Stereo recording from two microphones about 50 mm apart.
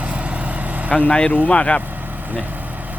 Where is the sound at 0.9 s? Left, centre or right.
Centre.